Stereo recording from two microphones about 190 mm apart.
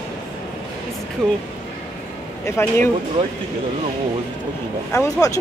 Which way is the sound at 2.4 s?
10° left (ahead or behind).